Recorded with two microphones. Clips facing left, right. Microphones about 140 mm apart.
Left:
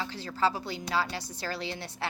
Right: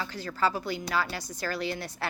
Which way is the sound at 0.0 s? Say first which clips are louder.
Even; 25° left (ahead or behind).